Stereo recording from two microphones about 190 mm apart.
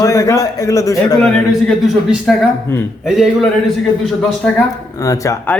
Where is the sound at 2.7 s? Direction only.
10° left (ahead or behind).